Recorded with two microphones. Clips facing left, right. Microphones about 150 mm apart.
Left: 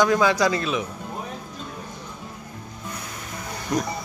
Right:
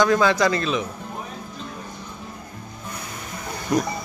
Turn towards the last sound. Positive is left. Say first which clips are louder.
# right 3 dB
turn(degrees=-5)  # may be behind; listen again after turning